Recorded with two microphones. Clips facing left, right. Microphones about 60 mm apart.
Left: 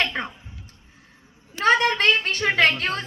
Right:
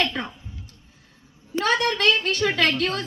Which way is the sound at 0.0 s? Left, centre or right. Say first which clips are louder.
Even; left.